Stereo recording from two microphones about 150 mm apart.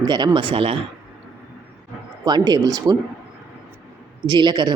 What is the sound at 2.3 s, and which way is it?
Speech, 25° right (ahead or behind).